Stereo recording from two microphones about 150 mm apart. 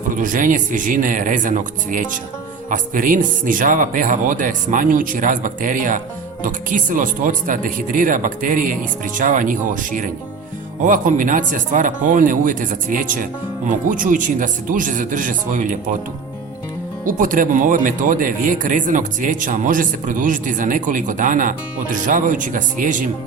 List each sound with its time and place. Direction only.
0.1 s speech: 60° right (ahead or behind)
17.1 s speech: 65° right (ahead or behind)